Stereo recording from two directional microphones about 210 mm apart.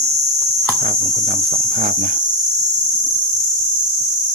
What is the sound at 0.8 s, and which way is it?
Cricket, 40° right (ahead or behind).